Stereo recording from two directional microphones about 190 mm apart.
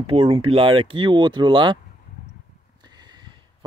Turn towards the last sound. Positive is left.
turn(degrees=-20)  # may be behind; listen again after turning